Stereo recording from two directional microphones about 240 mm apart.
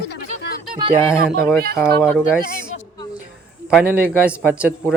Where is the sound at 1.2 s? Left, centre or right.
Right.